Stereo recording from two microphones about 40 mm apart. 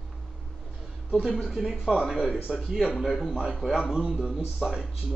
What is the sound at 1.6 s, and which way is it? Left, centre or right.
Speech, centre.